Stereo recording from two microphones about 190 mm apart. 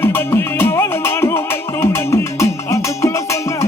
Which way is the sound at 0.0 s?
10° left (ahead or behind).